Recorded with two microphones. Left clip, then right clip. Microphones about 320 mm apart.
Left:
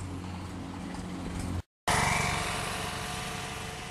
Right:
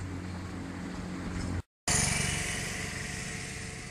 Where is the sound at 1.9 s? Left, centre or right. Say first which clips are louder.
Left 4 dB; left.